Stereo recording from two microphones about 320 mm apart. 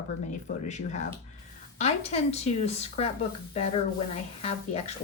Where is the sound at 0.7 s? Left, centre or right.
Left.